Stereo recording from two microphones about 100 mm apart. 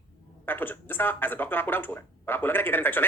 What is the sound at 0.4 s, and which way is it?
Speech, 20° left (ahead or behind).